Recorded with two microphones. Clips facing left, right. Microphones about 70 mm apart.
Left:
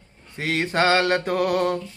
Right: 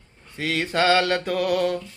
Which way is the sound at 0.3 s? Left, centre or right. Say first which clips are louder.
Left 1 dB; left.